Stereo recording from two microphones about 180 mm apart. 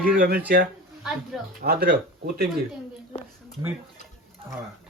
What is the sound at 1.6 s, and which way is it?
Speech, 60° right (ahead or behind).